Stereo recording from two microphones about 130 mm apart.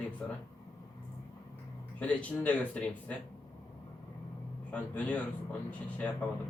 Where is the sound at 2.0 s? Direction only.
10° left (ahead or behind).